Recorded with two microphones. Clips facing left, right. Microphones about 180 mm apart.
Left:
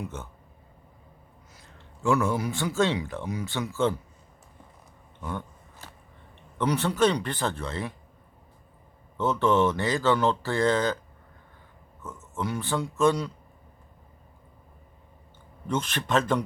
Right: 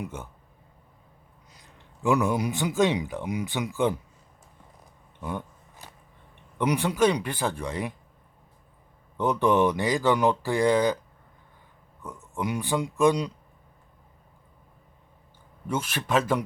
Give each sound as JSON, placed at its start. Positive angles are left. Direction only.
{"t": 0.0, "sound": "speech", "side_deg": -10}
{"t": 2.0, "sound": "speech", "side_deg": -15}
{"t": 6.6, "sound": "speech", "side_deg": -15}
{"t": 9.1, "sound": "speech", "side_deg": -15}
{"t": 12.0, "sound": "speech", "side_deg": -15}
{"t": 15.6, "sound": "speech", "side_deg": -10}